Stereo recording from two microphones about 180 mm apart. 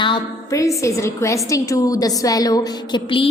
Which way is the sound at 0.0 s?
20° left (ahead or behind).